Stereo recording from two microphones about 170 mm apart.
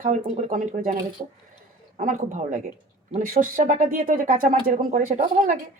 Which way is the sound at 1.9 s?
50° right (ahead or behind).